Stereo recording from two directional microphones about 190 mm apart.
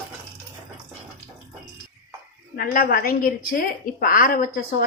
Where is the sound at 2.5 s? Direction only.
50° left (ahead or behind).